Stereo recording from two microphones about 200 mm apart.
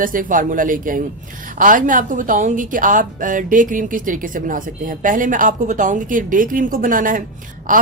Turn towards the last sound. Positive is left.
turn(degrees=-40)  # may be behind; listen again after turning